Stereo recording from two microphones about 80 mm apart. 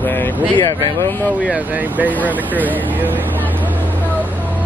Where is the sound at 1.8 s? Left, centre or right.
Right.